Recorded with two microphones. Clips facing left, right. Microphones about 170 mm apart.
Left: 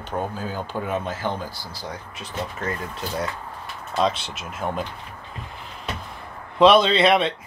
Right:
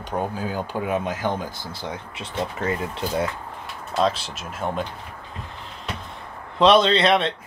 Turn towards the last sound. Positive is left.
turn(degrees=0)  # may be behind; listen again after turning